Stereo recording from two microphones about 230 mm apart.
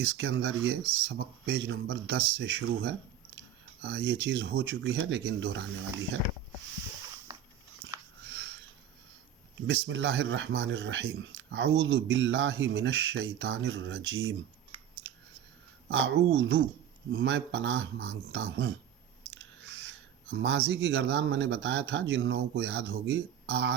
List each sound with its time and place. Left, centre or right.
0.0 s speech: right
7.3 s biting: centre
9.6 s speech: right
14.7 s scissors: right
15.9 s speech: right
19.3 s owl: right
20.3 s speech: right